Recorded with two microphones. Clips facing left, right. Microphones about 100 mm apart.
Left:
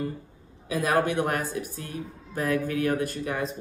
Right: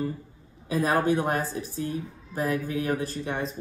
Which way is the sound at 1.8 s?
20° right (ahead or behind).